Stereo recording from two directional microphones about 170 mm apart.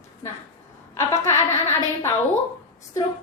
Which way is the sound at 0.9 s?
15° left (ahead or behind).